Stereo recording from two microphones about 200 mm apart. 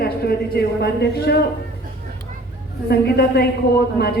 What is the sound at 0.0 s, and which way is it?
A woman's voice, 50° left (ahead or behind).